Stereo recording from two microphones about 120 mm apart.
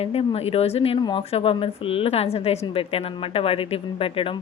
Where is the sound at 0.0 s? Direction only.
55° left (ahead or behind).